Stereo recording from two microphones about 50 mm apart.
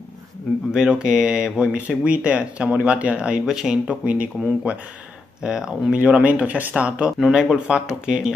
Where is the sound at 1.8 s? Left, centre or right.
Right.